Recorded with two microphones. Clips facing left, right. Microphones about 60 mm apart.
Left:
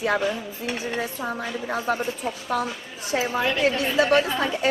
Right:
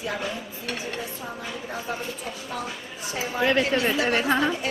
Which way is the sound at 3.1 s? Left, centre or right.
Left.